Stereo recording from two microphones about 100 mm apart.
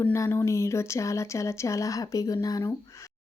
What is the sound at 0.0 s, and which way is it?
Speech, 25° left (ahead or behind).